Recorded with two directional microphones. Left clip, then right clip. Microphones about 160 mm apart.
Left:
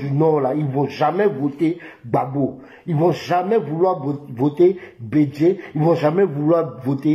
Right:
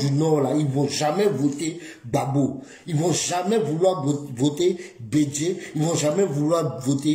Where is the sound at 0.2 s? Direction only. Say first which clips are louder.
Left 5 dB; 25° right (ahead or behind).